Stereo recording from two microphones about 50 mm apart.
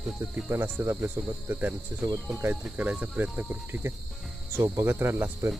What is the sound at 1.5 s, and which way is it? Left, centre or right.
Cricket, right.